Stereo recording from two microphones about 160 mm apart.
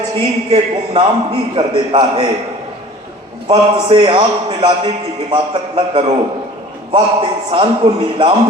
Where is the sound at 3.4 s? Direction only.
35° right (ahead or behind).